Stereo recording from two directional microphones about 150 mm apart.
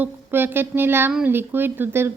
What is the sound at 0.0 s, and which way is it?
A woman's voice, 15° right (ahead or behind).